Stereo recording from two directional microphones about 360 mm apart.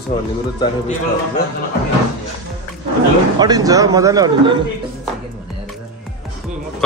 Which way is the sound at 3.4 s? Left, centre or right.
Centre.